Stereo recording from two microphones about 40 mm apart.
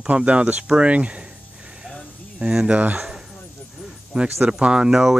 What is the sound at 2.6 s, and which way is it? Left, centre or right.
Speech, right.